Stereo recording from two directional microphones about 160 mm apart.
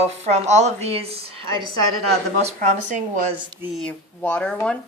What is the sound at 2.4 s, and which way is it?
Speech, 50° right (ahead or behind).